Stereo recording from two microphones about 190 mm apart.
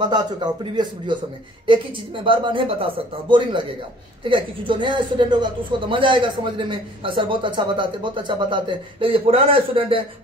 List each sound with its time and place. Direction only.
0.0 s speech: 25° right (ahead or behind)